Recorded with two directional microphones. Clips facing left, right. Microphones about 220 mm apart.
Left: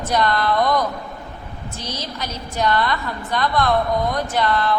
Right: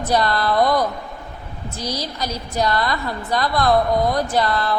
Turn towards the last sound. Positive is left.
turn(degrees=-35)  # may be behind; listen again after turning